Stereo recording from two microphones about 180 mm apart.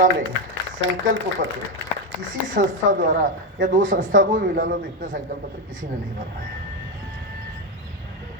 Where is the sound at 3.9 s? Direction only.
45° right (ahead or behind).